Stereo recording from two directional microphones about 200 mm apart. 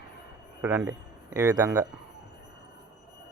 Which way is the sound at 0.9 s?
15° right (ahead or behind).